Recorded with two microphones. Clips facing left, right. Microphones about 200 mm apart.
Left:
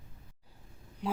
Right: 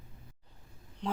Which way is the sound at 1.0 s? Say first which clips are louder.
Left 1 dB; 10° left (ahead or behind).